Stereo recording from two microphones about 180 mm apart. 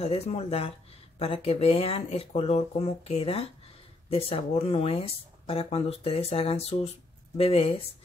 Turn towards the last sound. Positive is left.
turn(degrees=35)  # may be behind; listen again after turning